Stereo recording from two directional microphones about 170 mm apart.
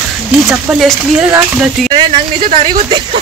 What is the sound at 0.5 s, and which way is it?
Speech, 5° right (ahead or behind).